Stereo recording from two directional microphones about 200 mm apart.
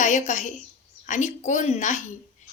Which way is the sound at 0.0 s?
35° left (ahead or behind).